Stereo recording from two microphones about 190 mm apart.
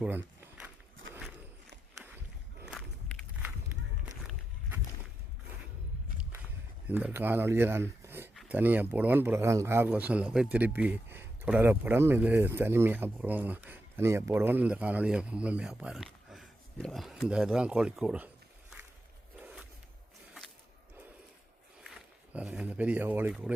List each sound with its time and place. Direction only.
0.0 s walk: 10° right (ahead or behind)
2.0 s a sound: centre (ahead or behind)
2.6 s walk: 5° left (ahead or behind)
4.2 s a sound: centre (ahead or behind)
6.8 s speech: 10° right (ahead or behind)
19.4 s zipper: 5° right (ahead or behind)
21.8 s speech: 5° right (ahead or behind)